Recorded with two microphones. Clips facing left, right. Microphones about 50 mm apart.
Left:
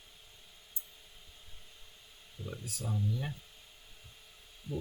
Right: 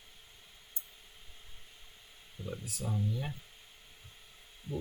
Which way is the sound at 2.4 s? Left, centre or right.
Centre.